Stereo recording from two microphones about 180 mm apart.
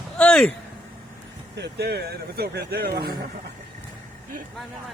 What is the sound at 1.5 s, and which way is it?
Speech, 65° right (ahead or behind).